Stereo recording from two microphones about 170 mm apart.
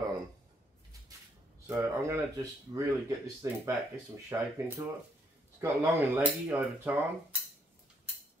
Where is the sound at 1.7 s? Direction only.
15° right (ahead or behind).